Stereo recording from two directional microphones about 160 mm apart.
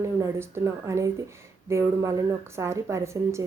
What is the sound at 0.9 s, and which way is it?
A woman's voice, 15° right (ahead or behind).